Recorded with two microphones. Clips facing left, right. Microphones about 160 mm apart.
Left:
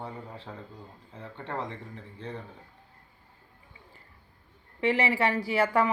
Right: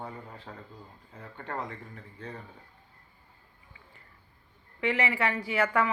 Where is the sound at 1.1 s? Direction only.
25° left (ahead or behind).